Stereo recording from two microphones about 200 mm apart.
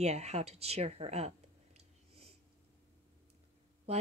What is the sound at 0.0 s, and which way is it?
Speech, 35° right (ahead or behind).